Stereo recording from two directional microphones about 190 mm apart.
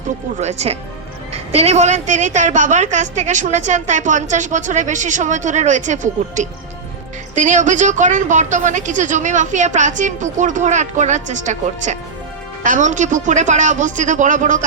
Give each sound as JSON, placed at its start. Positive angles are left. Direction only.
{"t": 0.3, "sound": "a woman's voice", "side_deg": -35}